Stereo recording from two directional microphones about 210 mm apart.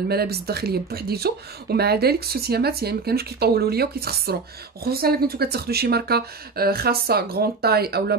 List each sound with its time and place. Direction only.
0.1 s speech: 50° right (ahead or behind)